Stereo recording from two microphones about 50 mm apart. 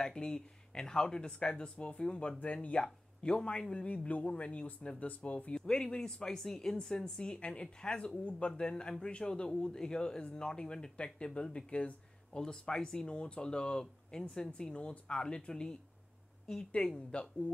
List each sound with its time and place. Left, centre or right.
0.0 s speech: centre
5.5 s speech: centre
16.7 s speech: centre